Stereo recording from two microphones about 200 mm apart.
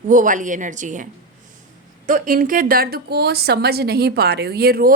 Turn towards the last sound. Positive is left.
turn(degrees=-50)  # may be behind; listen again after turning